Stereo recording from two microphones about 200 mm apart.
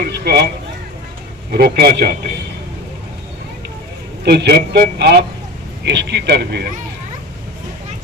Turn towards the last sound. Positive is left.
turn(degrees=-55)  # may be behind; listen again after turning